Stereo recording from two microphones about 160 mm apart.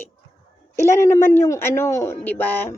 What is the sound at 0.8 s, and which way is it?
A man's voice, 15° left (ahead or behind).